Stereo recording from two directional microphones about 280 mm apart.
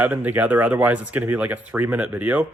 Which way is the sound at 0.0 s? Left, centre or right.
Centre.